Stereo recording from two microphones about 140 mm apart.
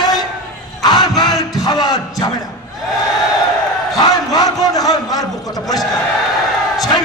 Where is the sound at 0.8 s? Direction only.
30° left (ahead or behind).